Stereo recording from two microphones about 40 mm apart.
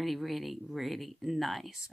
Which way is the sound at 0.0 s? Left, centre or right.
Centre.